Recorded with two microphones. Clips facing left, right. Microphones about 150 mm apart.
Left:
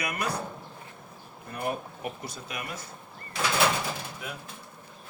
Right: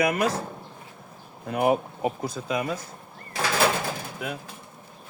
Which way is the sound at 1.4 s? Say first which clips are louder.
Right 10 dB; 90° right.